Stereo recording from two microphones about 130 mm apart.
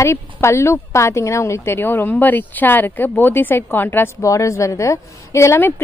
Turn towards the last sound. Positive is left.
turn(degrees=20)  # may be behind; listen again after turning